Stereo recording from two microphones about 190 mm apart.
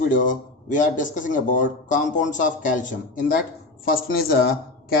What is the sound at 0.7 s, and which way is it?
A man's voice, 45° left (ahead or behind).